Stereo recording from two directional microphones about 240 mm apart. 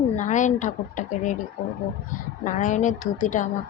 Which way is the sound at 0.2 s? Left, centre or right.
Left.